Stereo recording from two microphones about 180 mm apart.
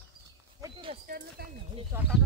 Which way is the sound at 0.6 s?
30° right (ahead or behind).